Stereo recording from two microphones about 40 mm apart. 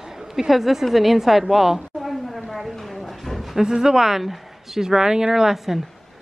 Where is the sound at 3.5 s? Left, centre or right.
Centre.